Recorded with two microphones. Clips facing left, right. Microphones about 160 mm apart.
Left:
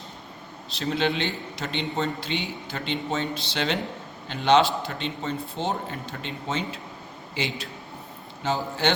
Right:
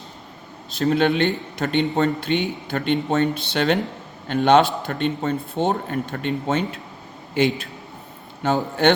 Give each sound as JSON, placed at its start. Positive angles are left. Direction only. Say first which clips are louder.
{"t": 0.7, "sound": "a man's voice", "louder": "right 7 dB", "side_deg": -50}